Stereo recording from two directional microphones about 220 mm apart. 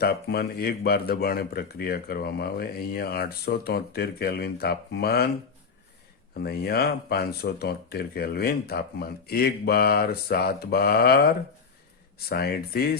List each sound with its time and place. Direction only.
0.0 s speech: 45° left (ahead or behind)
6.3 s speech: 45° left (ahead or behind)